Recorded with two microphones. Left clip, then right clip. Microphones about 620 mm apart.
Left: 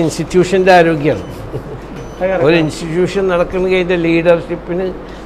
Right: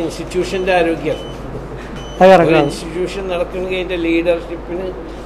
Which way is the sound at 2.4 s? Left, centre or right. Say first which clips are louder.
Left 1 dB; left.